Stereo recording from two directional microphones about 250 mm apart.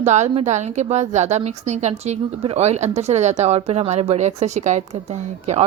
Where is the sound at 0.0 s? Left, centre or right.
Right.